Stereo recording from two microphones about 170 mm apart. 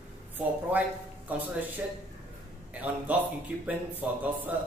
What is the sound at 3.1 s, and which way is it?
Speech, 10° right (ahead or behind).